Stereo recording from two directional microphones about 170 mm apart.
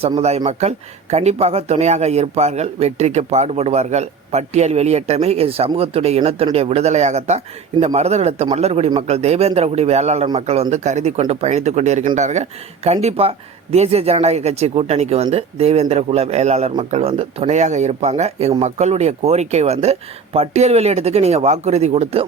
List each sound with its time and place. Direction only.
0.2 s speech: 40° right (ahead or behind)